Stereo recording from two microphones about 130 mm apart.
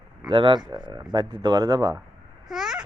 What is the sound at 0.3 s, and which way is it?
Speech, 40° right (ahead or behind).